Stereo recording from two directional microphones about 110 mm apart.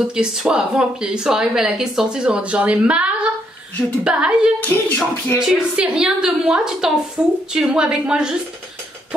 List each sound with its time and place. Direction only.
0.1 s speech: 5° right (ahead or behind)
4.6 s speech: 20° left (ahead or behind)
5.4 s a woman's voice: 5° right (ahead or behind)